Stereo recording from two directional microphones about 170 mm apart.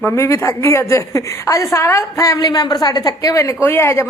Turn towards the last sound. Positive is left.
turn(degrees=15)  # may be behind; listen again after turning